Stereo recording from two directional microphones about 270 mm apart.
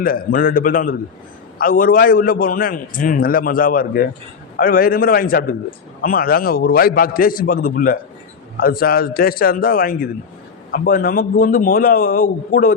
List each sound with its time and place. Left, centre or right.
0.0 s a man's voice: left